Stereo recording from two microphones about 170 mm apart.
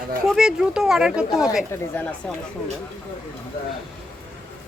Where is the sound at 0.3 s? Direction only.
5° right (ahead or behind).